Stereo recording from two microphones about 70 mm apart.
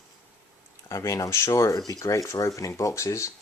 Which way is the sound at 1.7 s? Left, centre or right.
Left.